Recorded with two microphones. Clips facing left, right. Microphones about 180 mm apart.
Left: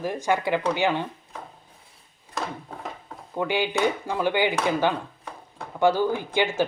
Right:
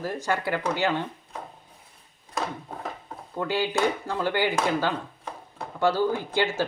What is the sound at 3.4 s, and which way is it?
Speech, 15° left (ahead or behind).